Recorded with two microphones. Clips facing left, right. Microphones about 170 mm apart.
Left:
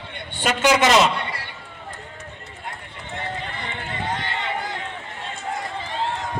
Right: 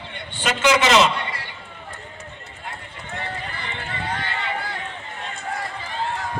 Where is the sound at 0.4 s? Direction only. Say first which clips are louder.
Left 1 dB; 45° left (ahead or behind).